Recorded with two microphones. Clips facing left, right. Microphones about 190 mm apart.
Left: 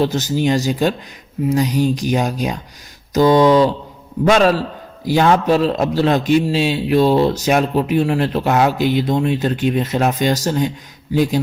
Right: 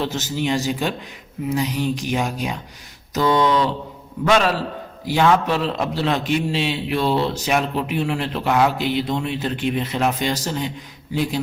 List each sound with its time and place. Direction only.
0.0 s a man's voice: 40° left (ahead or behind)